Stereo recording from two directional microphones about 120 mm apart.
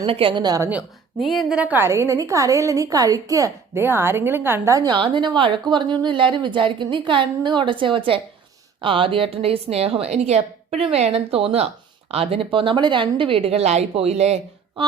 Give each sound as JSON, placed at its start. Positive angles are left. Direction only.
{"t": 0.1, "sound": "a woman's voice", "side_deg": -45}
{"t": 1.2, "sound": "a woman's voice", "side_deg": 0}
{"t": 1.5, "sound": "a woman's voice", "side_deg": -15}
{"t": 1.9, "sound": "a woman's voice", "side_deg": -25}
{"t": 4.9, "sound": "a woman's voice", "side_deg": -40}